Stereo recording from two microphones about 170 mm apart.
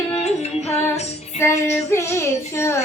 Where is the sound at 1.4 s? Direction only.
15° left (ahead or behind).